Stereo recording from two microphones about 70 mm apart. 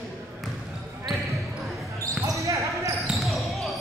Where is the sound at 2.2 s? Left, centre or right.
Right.